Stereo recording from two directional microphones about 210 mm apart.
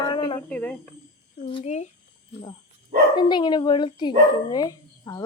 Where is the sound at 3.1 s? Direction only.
20° left (ahead or behind).